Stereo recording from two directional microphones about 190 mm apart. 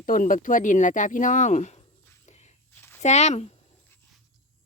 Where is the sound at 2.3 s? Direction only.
35° left (ahead or behind).